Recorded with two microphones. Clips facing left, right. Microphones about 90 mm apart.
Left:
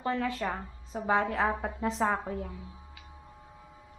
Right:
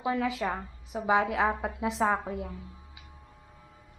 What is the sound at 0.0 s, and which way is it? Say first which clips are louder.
A woman's voice: right 2 dB; 5° right (ahead or behind).